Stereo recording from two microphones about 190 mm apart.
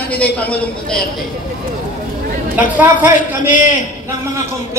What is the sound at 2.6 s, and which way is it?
Speech, 10° right (ahead or behind).